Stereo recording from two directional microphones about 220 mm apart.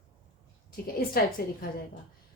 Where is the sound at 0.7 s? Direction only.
45° left (ahead or behind).